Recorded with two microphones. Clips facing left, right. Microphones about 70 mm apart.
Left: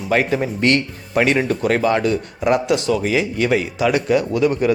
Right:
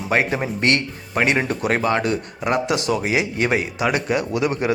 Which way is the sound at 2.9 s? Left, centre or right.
Right.